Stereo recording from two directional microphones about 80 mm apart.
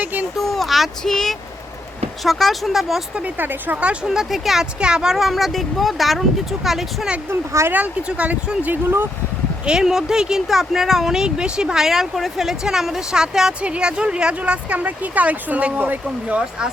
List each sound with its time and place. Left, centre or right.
0.0 s a sound: right
0.3 s speech: centre
3.2 s speech: right
3.8 s speech: centre
7.3 s speech: right
7.7 s speech: centre
9.6 s speech: centre